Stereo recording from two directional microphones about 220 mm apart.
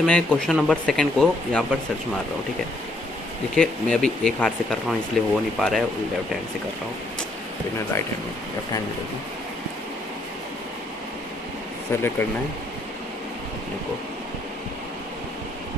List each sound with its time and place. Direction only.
0.0 s speech: 5° left (ahead or behind)
3.5 s speech: 5° left (ahead or behind)
11.9 s speech: 10° left (ahead or behind)